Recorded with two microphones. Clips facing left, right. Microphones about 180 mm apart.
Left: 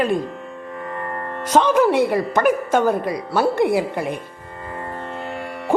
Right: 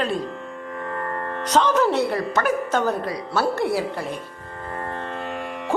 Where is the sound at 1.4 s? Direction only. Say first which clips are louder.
Left 4 dB; 10° left (ahead or behind).